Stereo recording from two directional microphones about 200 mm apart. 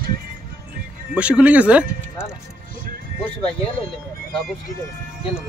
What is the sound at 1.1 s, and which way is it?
Speech, 5° right (ahead or behind).